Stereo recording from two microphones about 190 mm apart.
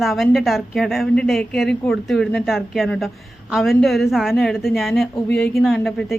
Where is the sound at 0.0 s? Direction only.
Centre (ahead or behind).